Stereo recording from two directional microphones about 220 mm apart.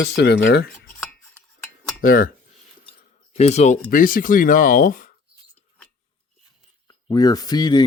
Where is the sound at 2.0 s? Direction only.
40° left (ahead or behind).